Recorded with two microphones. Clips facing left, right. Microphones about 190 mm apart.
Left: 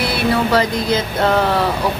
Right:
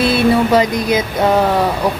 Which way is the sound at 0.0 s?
20° right (ahead or behind).